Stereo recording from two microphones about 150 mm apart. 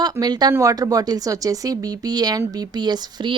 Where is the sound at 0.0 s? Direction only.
25° right (ahead or behind).